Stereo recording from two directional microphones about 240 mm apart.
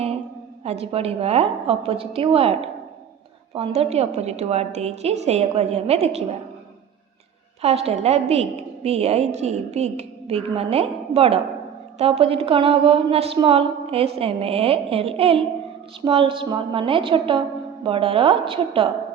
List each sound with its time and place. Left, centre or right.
0.6 s a woman's voice: right
7.6 s a woman's voice: right